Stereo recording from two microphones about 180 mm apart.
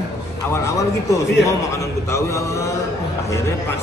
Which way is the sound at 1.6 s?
15° left (ahead or behind).